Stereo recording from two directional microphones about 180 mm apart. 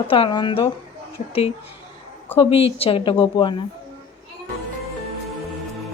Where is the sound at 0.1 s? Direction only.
30° left (ahead or behind).